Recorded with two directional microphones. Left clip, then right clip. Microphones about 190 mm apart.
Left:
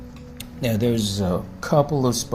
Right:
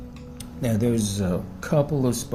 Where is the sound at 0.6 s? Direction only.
Centre (ahead or behind).